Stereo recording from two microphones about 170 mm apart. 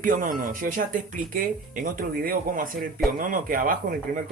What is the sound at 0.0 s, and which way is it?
Speech, 50° right (ahead or behind).